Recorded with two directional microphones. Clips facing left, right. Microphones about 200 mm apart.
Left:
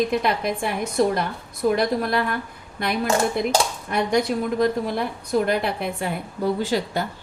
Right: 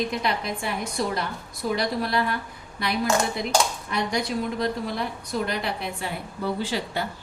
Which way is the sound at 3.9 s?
50° left (ahead or behind).